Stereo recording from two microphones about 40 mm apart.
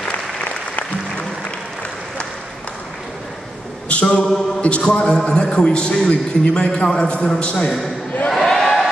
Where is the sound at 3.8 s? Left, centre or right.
Left.